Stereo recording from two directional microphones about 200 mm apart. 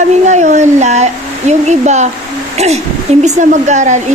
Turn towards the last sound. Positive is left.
turn(degrees=-35)  # may be behind; listen again after turning